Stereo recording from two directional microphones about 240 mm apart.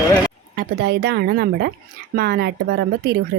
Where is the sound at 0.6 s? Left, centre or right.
Right.